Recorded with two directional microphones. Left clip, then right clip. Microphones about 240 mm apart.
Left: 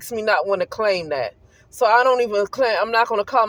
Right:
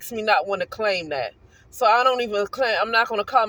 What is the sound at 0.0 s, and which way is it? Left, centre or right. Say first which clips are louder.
Speech: left 1 dB; left.